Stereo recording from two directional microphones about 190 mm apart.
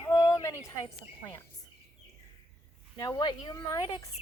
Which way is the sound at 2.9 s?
20° left (ahead or behind).